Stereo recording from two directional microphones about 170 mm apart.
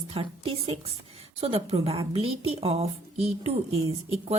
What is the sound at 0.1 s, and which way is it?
A woman's voice, 35° right (ahead or behind).